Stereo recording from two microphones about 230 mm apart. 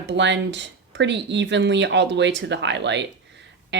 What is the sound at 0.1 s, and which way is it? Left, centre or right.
Speech, right.